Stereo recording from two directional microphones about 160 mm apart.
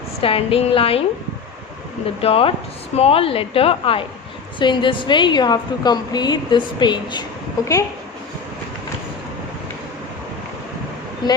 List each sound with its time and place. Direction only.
0.2 s a woman's voice: 35° left (ahead or behind)
2.2 s a woman's voice: 35° left (ahead or behind)